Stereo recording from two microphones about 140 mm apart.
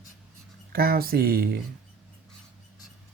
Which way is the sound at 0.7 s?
90° right.